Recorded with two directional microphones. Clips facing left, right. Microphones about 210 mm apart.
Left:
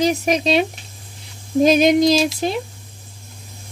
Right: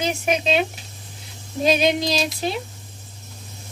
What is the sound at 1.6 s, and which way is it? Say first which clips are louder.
Speech: left 5 dB; 45° left (ahead or behind).